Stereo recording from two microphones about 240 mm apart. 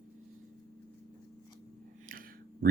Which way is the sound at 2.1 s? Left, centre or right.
Right.